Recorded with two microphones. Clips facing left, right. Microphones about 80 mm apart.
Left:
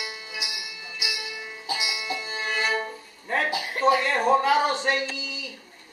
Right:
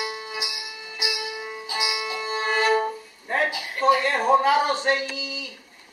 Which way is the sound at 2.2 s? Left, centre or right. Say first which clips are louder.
Right 7 dB; right.